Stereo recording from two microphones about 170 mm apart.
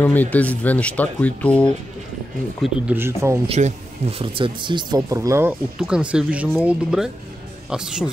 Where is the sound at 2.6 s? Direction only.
10° right (ahead or behind).